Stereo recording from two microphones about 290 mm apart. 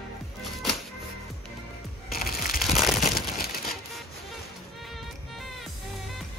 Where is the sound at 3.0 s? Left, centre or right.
Left.